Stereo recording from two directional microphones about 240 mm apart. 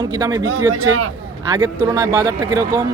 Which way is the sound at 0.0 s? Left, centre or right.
Centre.